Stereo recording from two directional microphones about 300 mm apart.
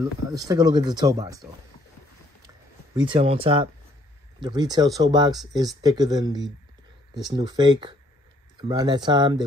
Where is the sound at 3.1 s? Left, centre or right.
Centre.